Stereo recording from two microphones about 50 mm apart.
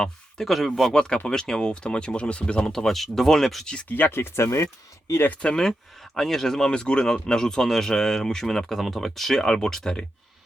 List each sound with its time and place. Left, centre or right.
0.0 s speech: centre
0.9 s speech: centre
3.8 s speech: left
4.1 s speech: left
4.5 s speech: left
5.4 s speech: centre